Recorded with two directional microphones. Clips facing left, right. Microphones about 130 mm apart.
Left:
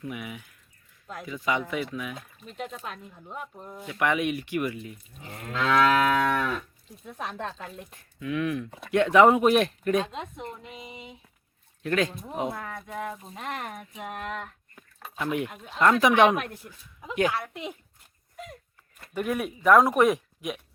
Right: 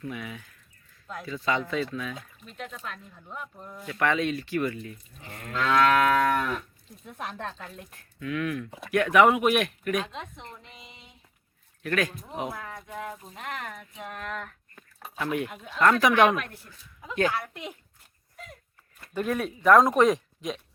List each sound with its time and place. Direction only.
0.0 s speech: 15° left (ahead or behind)
3.6 s speech: 25° left (ahead or behind)
5.3 s moo: 5° left (ahead or behind)
7.6 s moo: 5° left (ahead or behind)
8.2 s speech: 20° left (ahead or behind)
11.8 s speech: 25° left (ahead or behind)
14.0 s a sound: 40° left (ahead or behind)
15.2 s speech: 20° left (ahead or behind)
17.3 s moo: centre (ahead or behind)
19.1 s speech: 15° left (ahead or behind)